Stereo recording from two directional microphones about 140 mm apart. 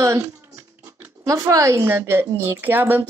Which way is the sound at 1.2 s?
25° right (ahead or behind).